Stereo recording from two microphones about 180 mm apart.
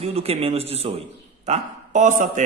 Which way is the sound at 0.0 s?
35° right (ahead or behind).